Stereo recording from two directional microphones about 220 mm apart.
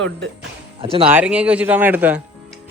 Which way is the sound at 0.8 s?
25° right (ahead or behind).